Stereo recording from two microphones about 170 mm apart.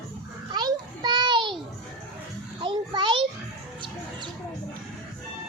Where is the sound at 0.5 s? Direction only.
25° right (ahead or behind).